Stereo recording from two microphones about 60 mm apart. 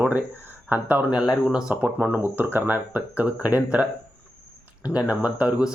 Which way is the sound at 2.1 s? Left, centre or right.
Right.